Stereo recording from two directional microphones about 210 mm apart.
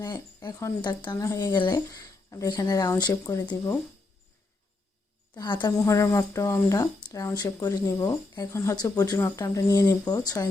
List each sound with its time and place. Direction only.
0.0 s speech: 20° left (ahead or behind)
5.3 s speech: 20° left (ahead or behind)